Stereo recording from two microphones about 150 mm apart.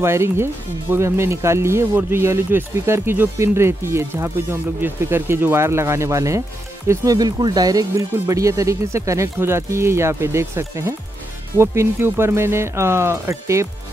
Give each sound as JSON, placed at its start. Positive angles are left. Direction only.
{"t": 0.0, "sound": "speech", "side_deg": -15}